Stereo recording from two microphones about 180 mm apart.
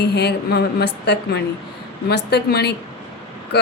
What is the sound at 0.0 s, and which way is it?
Speech, 70° left (ahead or behind).